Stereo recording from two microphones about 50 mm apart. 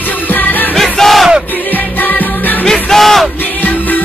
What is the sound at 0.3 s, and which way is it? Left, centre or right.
Music, left.